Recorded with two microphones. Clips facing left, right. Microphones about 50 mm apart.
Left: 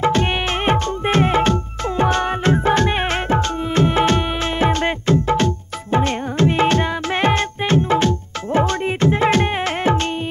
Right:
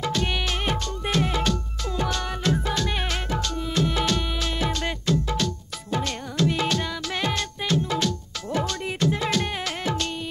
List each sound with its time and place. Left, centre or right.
0.0 s music: left